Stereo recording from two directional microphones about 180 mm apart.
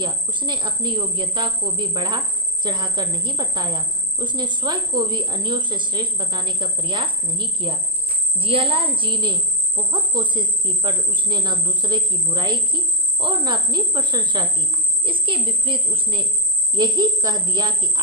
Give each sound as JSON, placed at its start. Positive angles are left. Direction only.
{"t": 0.0, "sound": "speech", "side_deg": -25}